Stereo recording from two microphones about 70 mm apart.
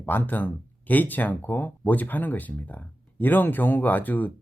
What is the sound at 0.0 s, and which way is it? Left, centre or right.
Speech, left.